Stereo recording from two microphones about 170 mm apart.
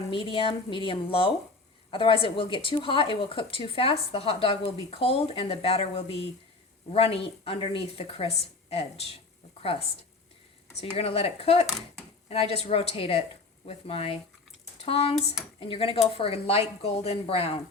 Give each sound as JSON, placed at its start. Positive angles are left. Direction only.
{"t": 0.1, "sound": "a woman's voice", "side_deg": 30}
{"t": 10.9, "sound": "a woman's voice", "side_deg": 35}